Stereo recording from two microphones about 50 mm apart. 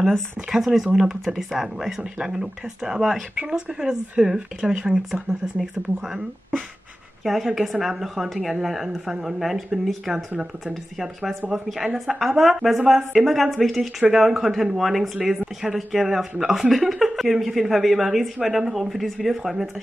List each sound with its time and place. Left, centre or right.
0.5 s speech: centre
2.0 s speech: centre
7.2 s speech: centre
11.5 s speech: centre